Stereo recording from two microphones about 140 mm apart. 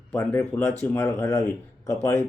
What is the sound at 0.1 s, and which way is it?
Speech, 15° left (ahead or behind).